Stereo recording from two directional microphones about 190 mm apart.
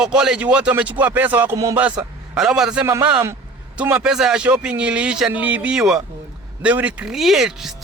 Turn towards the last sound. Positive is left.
turn(degrees=0)  # may be behind; listen again after turning